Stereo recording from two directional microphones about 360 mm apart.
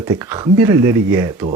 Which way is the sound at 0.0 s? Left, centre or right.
Centre.